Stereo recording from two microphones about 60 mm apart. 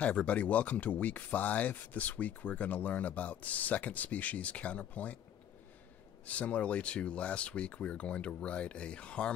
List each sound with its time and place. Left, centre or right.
0.0 s speech: left
6.2 s speech: left